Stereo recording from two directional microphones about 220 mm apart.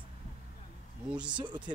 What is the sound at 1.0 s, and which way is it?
Speech, 5° right (ahead or behind).